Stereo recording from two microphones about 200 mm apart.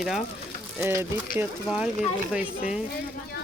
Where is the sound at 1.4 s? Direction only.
5° right (ahead or behind).